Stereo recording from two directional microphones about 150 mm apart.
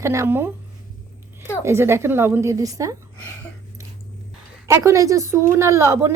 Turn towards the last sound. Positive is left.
turn(degrees=-20)  # may be behind; listen again after turning